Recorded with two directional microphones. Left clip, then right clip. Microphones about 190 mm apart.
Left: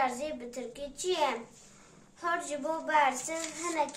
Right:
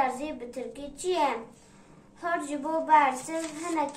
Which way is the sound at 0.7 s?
15° left (ahead or behind).